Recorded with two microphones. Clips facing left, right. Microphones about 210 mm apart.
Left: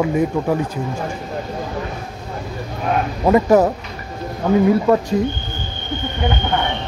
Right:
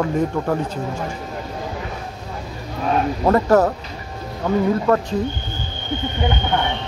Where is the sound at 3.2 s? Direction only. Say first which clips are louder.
Left 3 dB; 10° left (ahead or behind).